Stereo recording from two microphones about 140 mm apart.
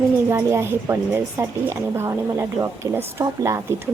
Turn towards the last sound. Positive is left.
turn(degrees=-20)  # may be behind; listen again after turning